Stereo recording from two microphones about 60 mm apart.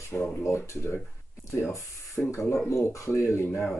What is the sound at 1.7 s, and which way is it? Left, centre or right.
Speech, left.